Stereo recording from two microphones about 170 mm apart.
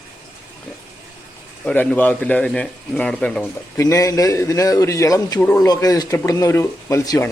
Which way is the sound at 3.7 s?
20° left (ahead or behind).